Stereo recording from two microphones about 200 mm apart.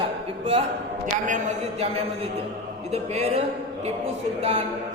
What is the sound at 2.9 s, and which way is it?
Speech, 30° right (ahead or behind).